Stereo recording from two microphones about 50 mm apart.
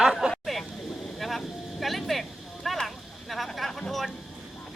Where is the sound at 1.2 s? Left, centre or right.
Centre.